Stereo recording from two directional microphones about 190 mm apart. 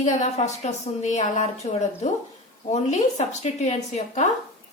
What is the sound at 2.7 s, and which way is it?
A woman's voice, 35° left (ahead or behind).